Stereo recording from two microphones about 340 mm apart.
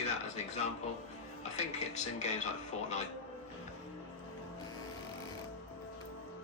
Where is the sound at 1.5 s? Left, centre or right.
Centre.